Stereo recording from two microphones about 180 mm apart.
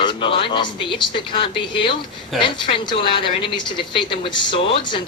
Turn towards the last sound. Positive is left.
turn(degrees=25)  # may be behind; listen again after turning